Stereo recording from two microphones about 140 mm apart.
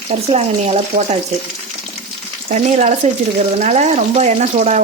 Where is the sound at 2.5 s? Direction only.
55° right (ahead or behind).